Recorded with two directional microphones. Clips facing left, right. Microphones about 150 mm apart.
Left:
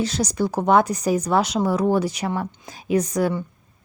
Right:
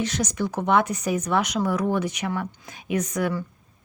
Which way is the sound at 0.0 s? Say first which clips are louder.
Left 3 dB; 35° left (ahead or behind).